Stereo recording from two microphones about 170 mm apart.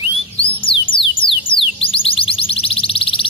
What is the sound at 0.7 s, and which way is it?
Music, 30° left (ahead or behind).